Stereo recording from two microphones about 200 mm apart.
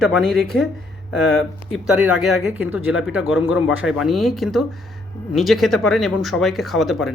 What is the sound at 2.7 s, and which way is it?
Speech, 90° left.